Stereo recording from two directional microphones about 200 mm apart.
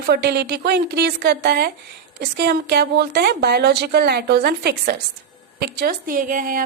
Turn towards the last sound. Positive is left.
turn(degrees=-45)  # may be behind; listen again after turning